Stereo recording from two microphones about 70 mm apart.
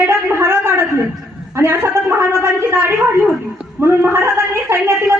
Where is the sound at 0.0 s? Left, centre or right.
Right.